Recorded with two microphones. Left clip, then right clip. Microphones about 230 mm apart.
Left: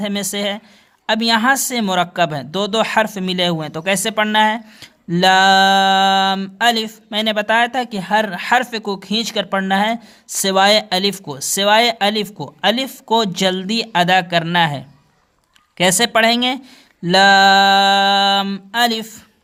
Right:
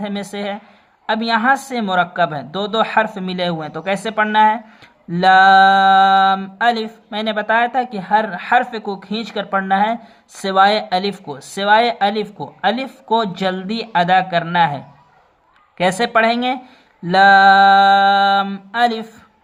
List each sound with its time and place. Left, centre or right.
0.0 s speech: left